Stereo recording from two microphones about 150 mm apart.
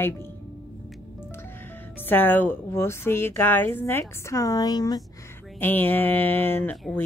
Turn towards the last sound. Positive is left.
turn(degrees=10)  # may be behind; listen again after turning